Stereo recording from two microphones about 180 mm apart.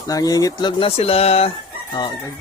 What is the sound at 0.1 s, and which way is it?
Speech, 20° left (ahead or behind).